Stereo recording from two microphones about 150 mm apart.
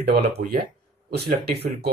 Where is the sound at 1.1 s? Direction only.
90° right.